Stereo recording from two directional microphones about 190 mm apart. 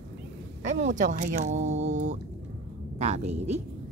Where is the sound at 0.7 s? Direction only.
40° right (ahead or behind).